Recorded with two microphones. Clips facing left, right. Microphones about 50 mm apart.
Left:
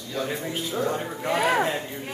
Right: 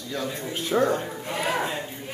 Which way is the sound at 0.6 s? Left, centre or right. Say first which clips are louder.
Right 6 dB; right.